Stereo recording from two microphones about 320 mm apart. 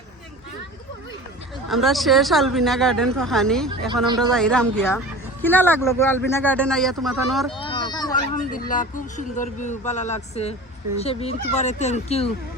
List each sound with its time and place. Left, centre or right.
1.7 s speech: centre
7.6 s a sound: centre
8.1 s speech: left